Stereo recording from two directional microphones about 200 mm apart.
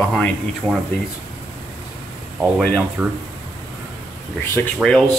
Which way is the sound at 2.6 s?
5° left (ahead or behind).